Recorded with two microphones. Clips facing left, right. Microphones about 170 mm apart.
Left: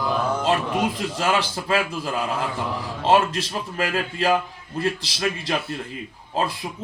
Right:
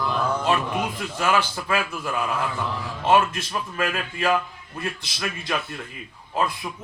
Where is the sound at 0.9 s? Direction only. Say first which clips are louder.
Even; 30° left (ahead or behind).